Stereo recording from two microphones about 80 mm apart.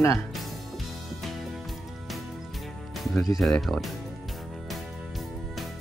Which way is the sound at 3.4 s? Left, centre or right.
Centre.